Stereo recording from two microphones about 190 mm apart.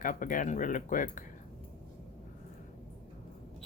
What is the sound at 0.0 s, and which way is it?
Speech, 45° left (ahead or behind).